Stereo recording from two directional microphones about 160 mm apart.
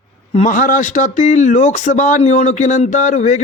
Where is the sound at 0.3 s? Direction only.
50° left (ahead or behind).